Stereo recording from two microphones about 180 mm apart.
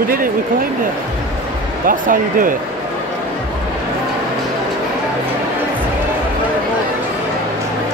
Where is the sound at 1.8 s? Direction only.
50° right (ahead or behind).